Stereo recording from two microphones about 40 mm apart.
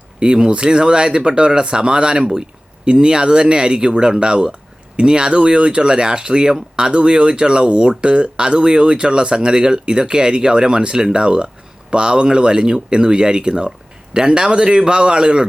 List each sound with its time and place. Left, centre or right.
0.2 s speech: centre